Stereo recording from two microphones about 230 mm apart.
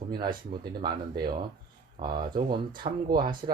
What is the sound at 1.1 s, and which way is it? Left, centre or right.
Speech, right.